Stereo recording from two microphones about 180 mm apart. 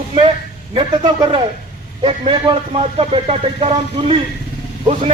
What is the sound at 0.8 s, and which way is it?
A man's voice, 25° right (ahead or behind).